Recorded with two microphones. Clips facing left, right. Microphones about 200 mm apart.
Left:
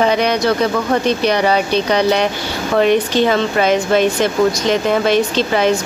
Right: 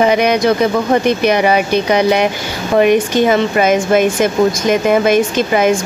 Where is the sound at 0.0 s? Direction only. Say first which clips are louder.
Right 3 dB; 10° right (ahead or behind).